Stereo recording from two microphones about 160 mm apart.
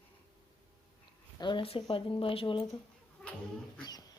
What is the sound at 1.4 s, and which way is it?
Speech, 30° left (ahead or behind).